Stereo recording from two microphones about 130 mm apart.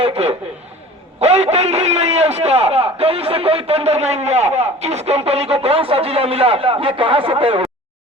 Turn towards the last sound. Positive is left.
turn(degrees=-45)  # may be behind; listen again after turning